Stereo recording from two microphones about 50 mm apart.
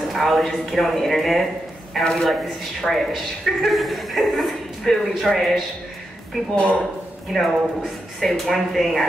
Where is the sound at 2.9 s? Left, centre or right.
Centre.